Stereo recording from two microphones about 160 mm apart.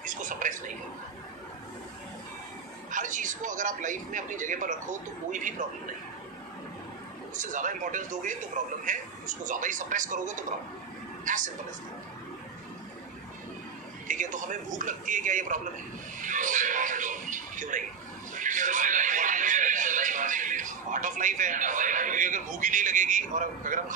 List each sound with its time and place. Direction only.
0.0 s a sound: 55° right (ahead or behind)
2.9 s speech: 55° right (ahead or behind)
7.3 s speech: 55° right (ahead or behind)
14.0 s a man's voice: 55° right (ahead or behind)
18.3 s music: 55° right (ahead or behind)